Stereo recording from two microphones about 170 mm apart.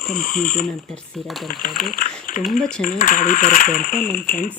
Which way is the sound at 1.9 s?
55° left (ahead or behind).